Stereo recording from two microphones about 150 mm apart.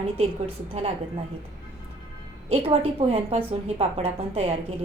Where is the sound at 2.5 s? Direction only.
40° right (ahead or behind).